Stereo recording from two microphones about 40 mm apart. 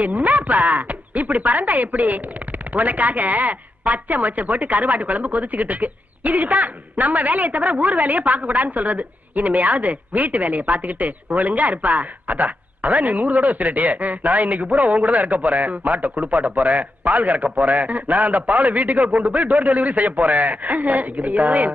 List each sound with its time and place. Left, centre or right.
0.0 s speech: right